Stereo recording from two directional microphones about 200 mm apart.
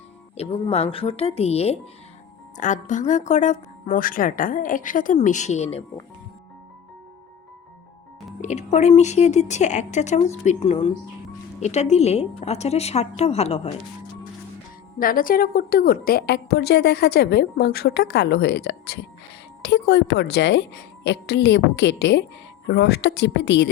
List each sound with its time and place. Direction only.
0.3 s speech: 30° left (ahead or behind)
8.4 s speech: 35° left (ahead or behind)
14.9 s a woman's voice: 45° left (ahead or behind); by 23.6 s 60° left (ahead or behind)